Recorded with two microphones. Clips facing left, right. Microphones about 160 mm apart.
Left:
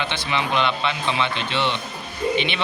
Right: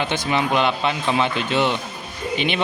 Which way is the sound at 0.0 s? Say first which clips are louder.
Right 4 dB; 45° right (ahead or behind).